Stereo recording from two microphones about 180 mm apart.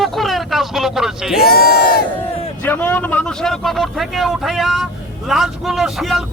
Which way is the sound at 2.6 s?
10° left (ahead or behind).